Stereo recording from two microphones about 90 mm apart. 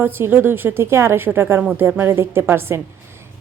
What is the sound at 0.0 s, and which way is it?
A woman's voice, 25° right (ahead or behind).